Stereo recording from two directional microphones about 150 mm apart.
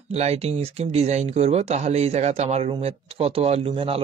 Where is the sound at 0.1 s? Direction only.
45° right (ahead or behind).